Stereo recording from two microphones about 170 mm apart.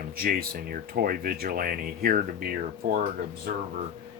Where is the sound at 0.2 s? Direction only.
60° right (ahead or behind).